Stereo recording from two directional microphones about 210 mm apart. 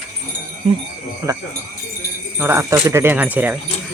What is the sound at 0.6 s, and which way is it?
A man's voice, 25° right (ahead or behind).